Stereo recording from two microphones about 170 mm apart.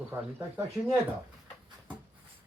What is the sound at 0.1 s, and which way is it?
Speech, 15° right (ahead or behind).